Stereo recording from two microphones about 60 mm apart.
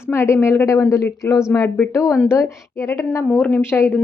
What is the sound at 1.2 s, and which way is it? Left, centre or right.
A woman's voice, left.